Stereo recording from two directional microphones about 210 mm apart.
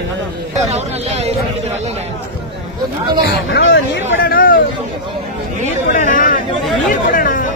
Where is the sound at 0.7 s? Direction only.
30° right (ahead or behind).